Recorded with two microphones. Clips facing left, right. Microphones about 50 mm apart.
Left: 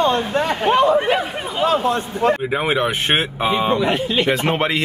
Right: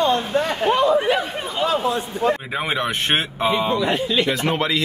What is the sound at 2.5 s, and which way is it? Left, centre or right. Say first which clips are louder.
Speech: left 4 dB; centre.